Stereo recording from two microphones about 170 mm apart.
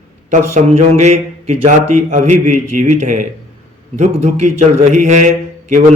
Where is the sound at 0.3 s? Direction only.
45° right (ahead or behind).